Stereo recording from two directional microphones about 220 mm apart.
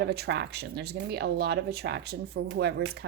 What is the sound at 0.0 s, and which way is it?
Speech, 50° right (ahead or behind).